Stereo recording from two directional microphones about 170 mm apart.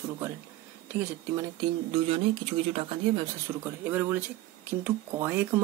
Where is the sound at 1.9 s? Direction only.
35° right (ahead or behind).